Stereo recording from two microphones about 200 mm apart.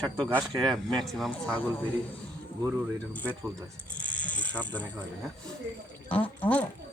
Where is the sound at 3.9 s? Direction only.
5° left (ahead or behind).